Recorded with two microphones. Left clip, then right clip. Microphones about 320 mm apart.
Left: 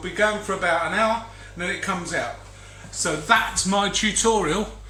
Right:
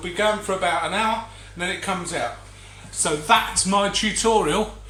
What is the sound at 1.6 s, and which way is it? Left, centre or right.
Speech, centre.